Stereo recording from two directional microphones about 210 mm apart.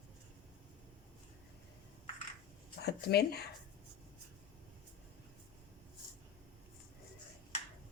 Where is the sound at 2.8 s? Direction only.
50° left (ahead or behind).